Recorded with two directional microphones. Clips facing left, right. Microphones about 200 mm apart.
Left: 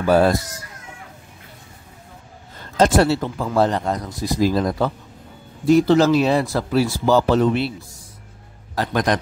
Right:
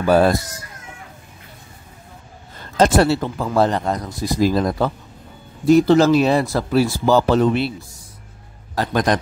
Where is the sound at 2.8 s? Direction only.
60° right (ahead or behind).